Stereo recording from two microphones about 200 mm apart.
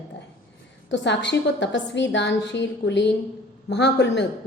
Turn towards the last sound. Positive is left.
turn(degrees=60)  # may be behind; listen again after turning